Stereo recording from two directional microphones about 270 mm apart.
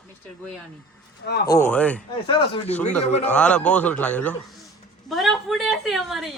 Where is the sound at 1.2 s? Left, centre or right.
Left.